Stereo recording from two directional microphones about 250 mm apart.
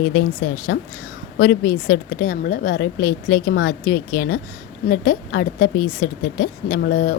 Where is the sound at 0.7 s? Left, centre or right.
Left.